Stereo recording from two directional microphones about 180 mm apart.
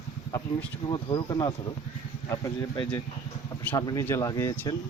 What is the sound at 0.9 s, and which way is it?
Speech, 25° left (ahead or behind).